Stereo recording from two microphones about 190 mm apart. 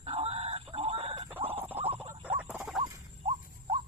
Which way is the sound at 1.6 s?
10° right (ahead or behind).